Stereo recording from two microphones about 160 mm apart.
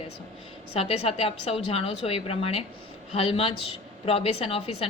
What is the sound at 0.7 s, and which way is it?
A woman's voice, 40° left (ahead or behind).